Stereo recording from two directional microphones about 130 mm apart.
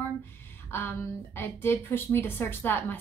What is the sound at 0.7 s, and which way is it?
A woman's voice, 20° left (ahead or behind).